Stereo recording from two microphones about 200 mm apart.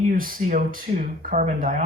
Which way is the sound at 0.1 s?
45° right (ahead or behind).